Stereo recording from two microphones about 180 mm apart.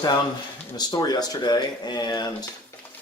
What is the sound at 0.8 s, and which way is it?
Speech, 20° left (ahead or behind).